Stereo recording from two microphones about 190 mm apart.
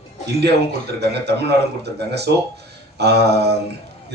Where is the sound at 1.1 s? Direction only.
60° right (ahead or behind).